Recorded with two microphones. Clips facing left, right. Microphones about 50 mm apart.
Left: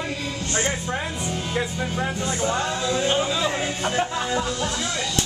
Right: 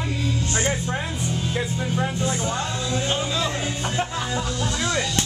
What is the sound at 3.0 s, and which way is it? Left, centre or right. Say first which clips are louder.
Speech: left 3 dB; centre.